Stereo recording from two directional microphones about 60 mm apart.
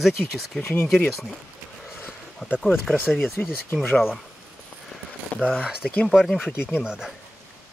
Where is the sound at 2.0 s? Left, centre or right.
Left.